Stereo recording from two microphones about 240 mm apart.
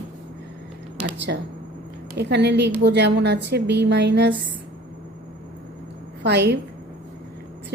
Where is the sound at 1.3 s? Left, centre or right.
Right.